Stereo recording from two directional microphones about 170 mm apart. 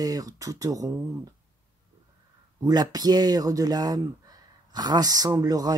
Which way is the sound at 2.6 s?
20° right (ahead or behind).